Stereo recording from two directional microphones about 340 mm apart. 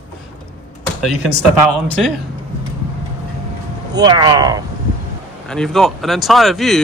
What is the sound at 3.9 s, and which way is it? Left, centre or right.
Speech, centre.